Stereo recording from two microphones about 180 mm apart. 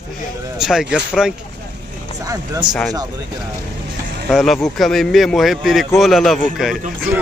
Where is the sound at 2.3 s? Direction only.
25° right (ahead or behind).